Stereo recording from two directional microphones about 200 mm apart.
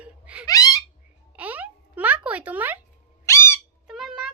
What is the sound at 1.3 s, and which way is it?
A child's voice, 10° right (ahead or behind).